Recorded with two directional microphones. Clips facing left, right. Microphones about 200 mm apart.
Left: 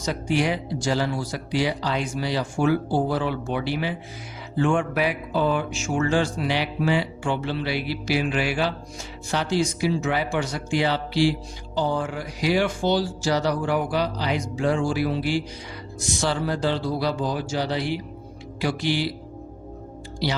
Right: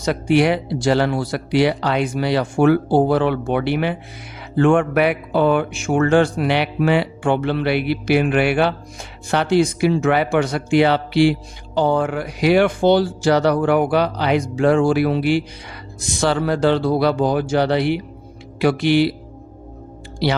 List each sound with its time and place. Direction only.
0.0 s speech: 65° right (ahead or behind)